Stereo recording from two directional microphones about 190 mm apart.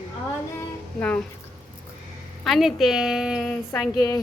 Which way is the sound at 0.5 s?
10° left (ahead or behind).